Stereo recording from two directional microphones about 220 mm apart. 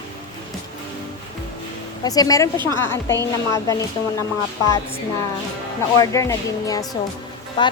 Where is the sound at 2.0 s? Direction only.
15° left (ahead or behind).